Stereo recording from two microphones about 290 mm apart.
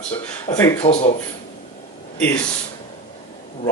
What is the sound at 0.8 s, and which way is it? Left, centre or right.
Speech, left.